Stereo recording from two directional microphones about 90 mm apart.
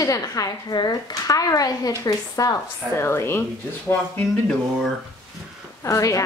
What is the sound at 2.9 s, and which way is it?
Speech, 30° left (ahead or behind).